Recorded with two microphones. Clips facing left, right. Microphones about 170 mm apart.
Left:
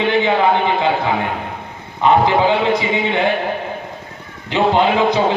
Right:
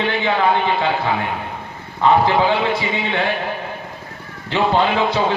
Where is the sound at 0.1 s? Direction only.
15° left (ahead or behind).